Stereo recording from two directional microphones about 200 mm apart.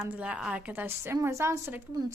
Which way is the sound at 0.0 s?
5° right (ahead or behind).